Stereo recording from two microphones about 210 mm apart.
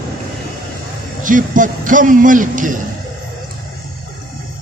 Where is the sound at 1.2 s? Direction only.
40° right (ahead or behind).